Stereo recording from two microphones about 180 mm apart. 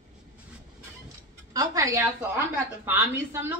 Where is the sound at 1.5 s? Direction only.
20° right (ahead or behind).